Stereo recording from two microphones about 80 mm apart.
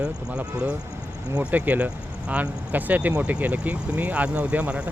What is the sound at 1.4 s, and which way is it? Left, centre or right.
Speech, right.